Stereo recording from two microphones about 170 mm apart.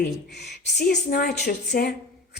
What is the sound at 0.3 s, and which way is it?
Speech, 85° left.